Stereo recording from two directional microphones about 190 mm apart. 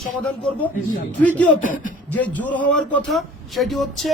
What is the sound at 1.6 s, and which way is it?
Speech, 45° left (ahead or behind).